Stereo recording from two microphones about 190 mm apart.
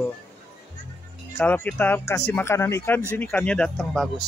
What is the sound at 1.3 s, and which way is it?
Speech, 10° left (ahead or behind).